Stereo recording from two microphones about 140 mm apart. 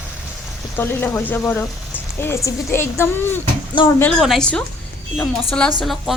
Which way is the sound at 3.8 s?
35° left (ahead or behind).